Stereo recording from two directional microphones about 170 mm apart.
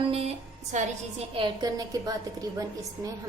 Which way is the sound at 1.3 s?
25° right (ahead or behind).